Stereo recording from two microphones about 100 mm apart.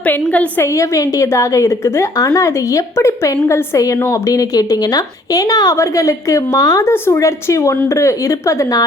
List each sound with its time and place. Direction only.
0.0 s a woman's voice: 15° left (ahead or behind)
0.6 s a woman's voice: 35° left (ahead or behind)